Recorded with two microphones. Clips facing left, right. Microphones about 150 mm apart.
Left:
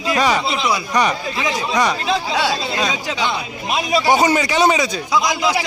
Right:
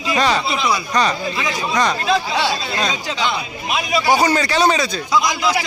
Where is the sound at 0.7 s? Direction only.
15° left (ahead or behind).